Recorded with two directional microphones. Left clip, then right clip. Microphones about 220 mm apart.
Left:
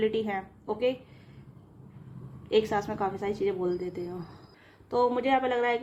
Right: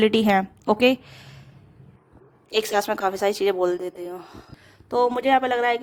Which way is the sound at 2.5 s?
45° right (ahead or behind).